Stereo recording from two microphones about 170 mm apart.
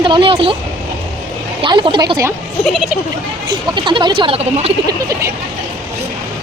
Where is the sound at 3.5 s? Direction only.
25° right (ahead or behind).